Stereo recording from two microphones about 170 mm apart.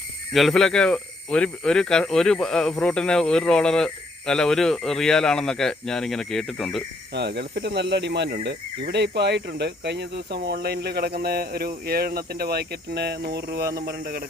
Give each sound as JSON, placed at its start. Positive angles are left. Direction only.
{"t": 0.3, "sound": "speech", "side_deg": 0}
{"t": 7.1, "sound": "speech", "side_deg": -80}